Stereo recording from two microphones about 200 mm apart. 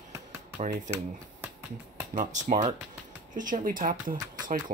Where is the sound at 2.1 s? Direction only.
40° right (ahead or behind).